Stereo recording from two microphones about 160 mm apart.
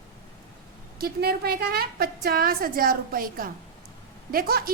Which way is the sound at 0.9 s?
75° right (ahead or behind).